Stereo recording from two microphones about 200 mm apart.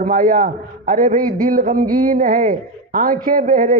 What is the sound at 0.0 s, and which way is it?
A man's voice, 40° right (ahead or behind).